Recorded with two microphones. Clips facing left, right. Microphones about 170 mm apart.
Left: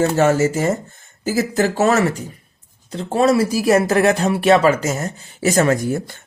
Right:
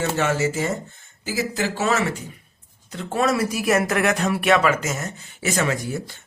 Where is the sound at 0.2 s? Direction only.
45° left (ahead or behind).